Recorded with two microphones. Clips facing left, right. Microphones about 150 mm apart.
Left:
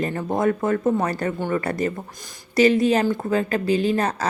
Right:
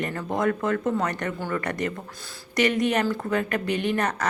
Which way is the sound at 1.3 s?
20° left (ahead or behind).